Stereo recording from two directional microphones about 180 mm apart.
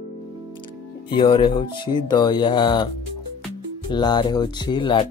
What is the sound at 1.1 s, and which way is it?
Speech, 25° left (ahead or behind).